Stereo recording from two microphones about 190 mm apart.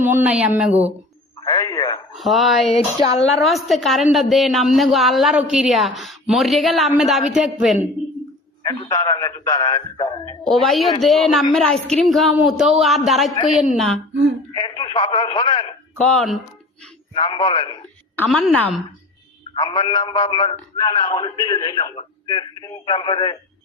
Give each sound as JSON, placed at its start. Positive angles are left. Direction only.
{"t": 0.0, "sound": "speech", "side_deg": -10}
{"t": 1.4, "sound": "a sound", "side_deg": 20}
{"t": 2.1, "sound": "speech", "side_deg": 0}
{"t": 2.7, "sound": "speech", "side_deg": 30}
{"t": 3.4, "sound": "a woman's voice", "side_deg": 0}
{"t": 8.9, "sound": "a man's voice", "side_deg": 20}
{"t": 10.4, "sound": "a woman's voice", "side_deg": 0}
{"t": 14.1, "sound": "speech", "side_deg": -65}
{"t": 14.5, "sound": "a man's voice", "side_deg": 25}
{"t": 16.0, "sound": "a woman's voice", "side_deg": 0}
{"t": 17.2, "sound": "a man's voice", "side_deg": 25}
{"t": 18.2, "sound": "a woman's voice", "side_deg": 0}
{"t": 19.5, "sound": "a man's voice", "side_deg": 25}